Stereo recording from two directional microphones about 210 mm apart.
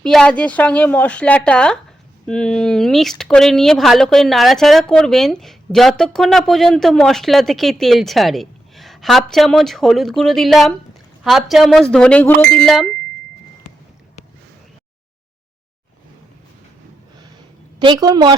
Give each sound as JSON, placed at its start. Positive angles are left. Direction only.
{"t": 0.0, "sound": "speech", "side_deg": 5}
{"t": 17.7, "sound": "a woman's voice", "side_deg": -20}